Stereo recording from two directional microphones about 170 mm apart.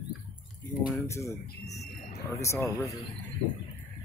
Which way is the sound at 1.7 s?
40° left (ahead or behind).